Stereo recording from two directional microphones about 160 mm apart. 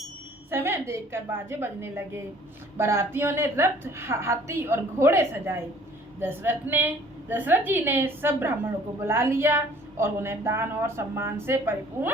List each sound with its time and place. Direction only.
0.5 s a woman's voice: 15° right (ahead or behind)